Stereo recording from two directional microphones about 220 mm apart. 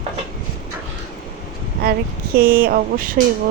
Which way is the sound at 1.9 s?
45° right (ahead or behind).